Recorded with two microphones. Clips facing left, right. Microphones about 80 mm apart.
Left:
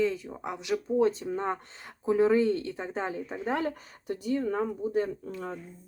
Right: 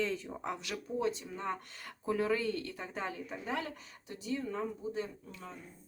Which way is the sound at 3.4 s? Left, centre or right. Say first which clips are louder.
Left 8 dB; left.